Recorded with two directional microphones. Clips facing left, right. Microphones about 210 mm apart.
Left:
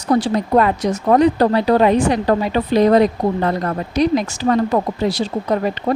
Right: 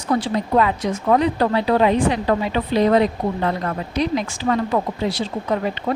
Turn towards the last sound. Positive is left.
turn(degrees=40)  # may be behind; listen again after turning